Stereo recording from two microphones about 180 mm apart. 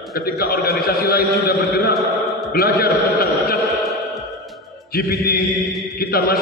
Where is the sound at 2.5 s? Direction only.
60° left (ahead or behind).